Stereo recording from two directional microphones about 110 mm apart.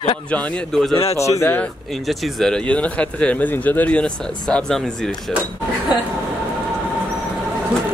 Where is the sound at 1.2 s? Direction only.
25° left (ahead or behind).